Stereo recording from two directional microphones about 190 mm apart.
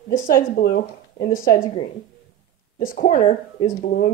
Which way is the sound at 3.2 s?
30° left (ahead or behind).